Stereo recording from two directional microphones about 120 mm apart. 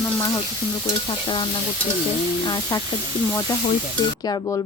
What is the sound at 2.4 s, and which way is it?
Speech, 35° left (ahead or behind).